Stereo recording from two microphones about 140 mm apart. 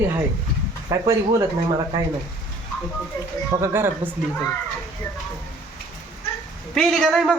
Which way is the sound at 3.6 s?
15° right (ahead or behind).